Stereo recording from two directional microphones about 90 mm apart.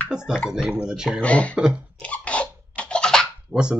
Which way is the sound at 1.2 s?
15° left (ahead or behind).